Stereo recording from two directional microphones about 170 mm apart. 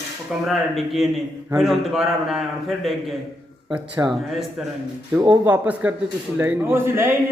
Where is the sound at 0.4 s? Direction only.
Centre (ahead or behind).